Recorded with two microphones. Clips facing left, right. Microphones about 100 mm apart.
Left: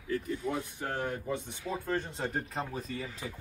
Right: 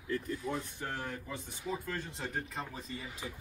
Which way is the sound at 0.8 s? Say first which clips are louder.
Left 5 dB; 25° left (ahead or behind).